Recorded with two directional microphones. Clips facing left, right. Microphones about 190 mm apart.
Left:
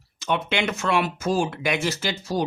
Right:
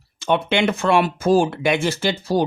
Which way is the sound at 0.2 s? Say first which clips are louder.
Right 5 dB; 30° right (ahead or behind).